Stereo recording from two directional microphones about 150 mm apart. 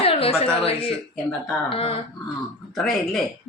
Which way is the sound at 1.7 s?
40° left (ahead or behind).